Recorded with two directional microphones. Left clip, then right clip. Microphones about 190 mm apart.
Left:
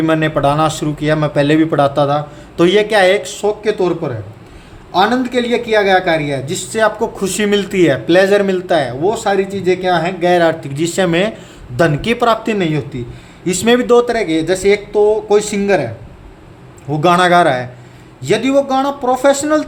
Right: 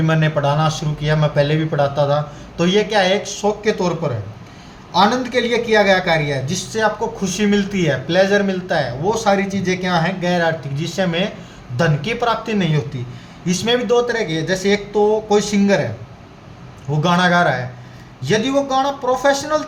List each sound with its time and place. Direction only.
0.0 s speech: 40° left (ahead or behind)
17.0 s speech: 45° left (ahead or behind)